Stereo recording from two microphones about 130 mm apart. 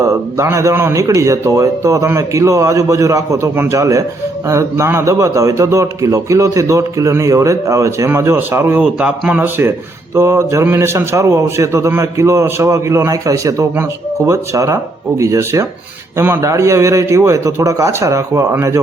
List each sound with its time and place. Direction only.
0.0 s a man's voice: 20° right (ahead or behind)